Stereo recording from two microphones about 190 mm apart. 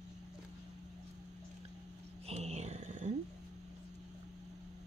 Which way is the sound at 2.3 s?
35° right (ahead or behind).